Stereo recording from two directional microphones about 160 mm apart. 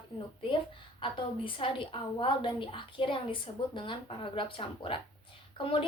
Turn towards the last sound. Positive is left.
turn(degrees=35)  # may be behind; listen again after turning